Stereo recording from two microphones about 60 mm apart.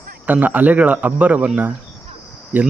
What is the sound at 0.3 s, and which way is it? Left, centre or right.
Speech, right.